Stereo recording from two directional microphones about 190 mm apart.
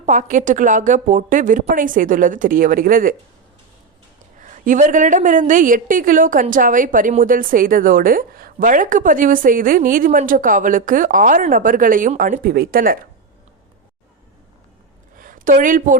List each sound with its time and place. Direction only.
0.0 s a woman's voice: 40° right (ahead or behind)
4.4 s a woman's voice: 40° right (ahead or behind)
15.1 s a sound: 45° right (ahead or behind)